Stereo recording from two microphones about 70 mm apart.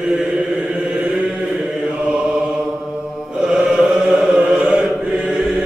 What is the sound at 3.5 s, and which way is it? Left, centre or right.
Chant, centre.